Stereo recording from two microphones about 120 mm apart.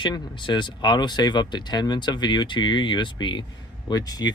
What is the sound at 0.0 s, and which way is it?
Speech, 40° left (ahead or behind).